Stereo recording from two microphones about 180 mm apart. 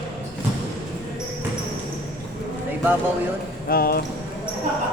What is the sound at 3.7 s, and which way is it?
Speech, 55° left (ahead or behind).